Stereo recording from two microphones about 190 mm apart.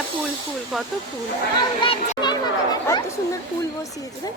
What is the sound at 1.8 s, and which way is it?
Speech, 25° left (ahead or behind).